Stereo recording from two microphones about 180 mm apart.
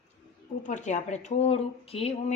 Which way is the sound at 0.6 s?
40° left (ahead or behind).